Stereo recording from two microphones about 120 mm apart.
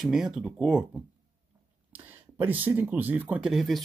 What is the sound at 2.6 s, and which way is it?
Speech, 15° right (ahead or behind).